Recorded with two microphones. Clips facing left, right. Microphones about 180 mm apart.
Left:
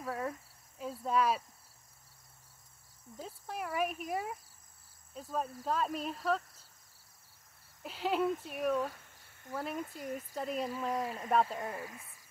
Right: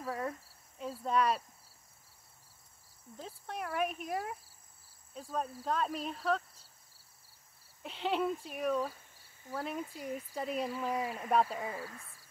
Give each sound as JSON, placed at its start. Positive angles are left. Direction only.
{"t": 0.0, "sound": "speech", "side_deg": 0}
{"t": 3.2, "sound": "speech", "side_deg": 5}
{"t": 7.8, "sound": "speech", "side_deg": 5}
{"t": 11.7, "sound": "speech", "side_deg": 15}